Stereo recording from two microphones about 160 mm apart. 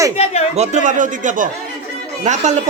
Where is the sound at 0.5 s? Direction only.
45° right (ahead or behind).